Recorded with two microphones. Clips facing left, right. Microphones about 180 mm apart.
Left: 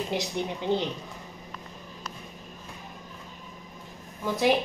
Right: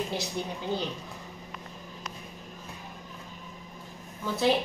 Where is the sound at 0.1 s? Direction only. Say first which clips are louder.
Left 3 dB; 20° left (ahead or behind).